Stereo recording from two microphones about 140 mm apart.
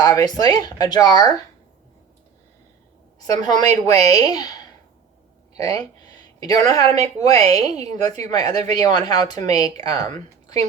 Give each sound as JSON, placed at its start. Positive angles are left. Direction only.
{"t": 0.0, "sound": "speech", "side_deg": 25}
{"t": 3.4, "sound": "speech", "side_deg": 30}
{"t": 3.7, "sound": "a woman's voice", "side_deg": -50}
{"t": 4.1, "sound": "speech", "side_deg": 25}